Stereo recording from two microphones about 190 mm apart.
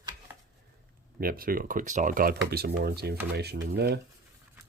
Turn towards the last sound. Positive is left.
turn(degrees=-60)  # may be behind; listen again after turning